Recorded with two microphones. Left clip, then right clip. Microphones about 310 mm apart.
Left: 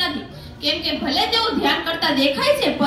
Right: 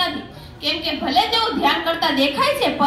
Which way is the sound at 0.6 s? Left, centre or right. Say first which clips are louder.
Even; centre.